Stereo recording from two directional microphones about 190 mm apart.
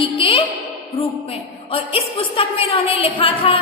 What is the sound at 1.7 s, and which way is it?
A woman's voice, 30° left (ahead or behind).